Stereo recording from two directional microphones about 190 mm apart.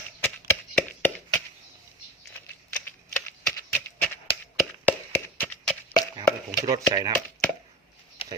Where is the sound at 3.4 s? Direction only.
10° left (ahead or behind).